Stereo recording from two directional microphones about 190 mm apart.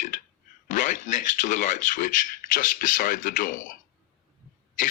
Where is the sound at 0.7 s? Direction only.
40° left (ahead or behind).